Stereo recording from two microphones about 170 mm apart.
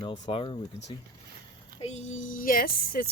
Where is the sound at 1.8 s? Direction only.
40° left (ahead or behind); by 3.1 s 60° left (ahead or behind).